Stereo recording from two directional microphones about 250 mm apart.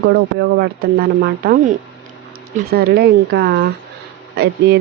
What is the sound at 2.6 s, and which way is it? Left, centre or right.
Speech, right.